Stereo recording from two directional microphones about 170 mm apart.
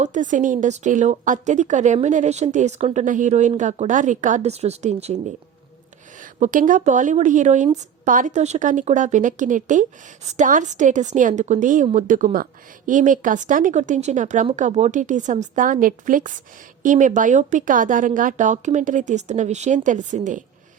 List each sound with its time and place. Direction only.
0.0 s a woman's voice: 45° right (ahead or behind)